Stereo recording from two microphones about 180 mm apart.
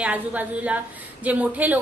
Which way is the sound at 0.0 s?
10° right (ahead or behind).